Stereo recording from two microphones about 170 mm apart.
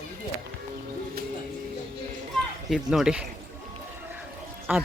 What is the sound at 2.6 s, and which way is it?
Speech, centre (ahead or behind).